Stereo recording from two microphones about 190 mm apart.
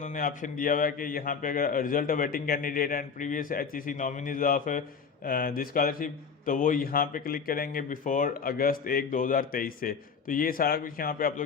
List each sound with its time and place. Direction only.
0.0 s a man's voice: 45° left (ahead or behind)